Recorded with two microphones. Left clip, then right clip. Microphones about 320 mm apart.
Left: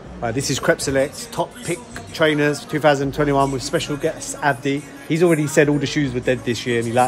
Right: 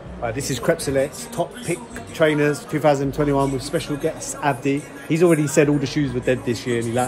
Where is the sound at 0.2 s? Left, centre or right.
Left.